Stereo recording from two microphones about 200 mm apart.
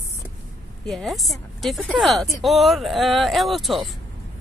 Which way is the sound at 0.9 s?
Centre (ahead or behind).